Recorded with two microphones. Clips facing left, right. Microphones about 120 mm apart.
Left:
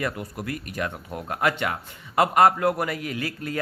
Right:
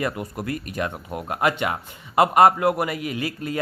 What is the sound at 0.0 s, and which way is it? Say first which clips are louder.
A man's voice: right 3 dB; 25° right (ahead or behind).